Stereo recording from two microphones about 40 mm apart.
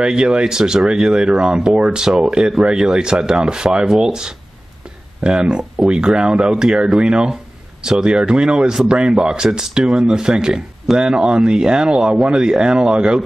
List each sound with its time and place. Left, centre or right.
0.0 s speech: right
2.0 s speech: centre
2.6 s speech: right